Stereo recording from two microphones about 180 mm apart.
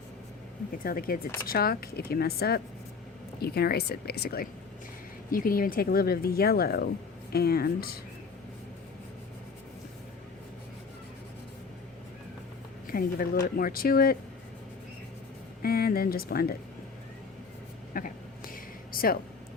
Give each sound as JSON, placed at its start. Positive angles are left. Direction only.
{"t": 0.9, "sound": "speech", "side_deg": 55}
{"t": 12.9, "sound": "speech", "side_deg": 55}
{"t": 15.6, "sound": "speech", "side_deg": 55}
{"t": 17.9, "sound": "speech", "side_deg": 50}
{"t": 18.5, "sound": "a sound", "side_deg": 55}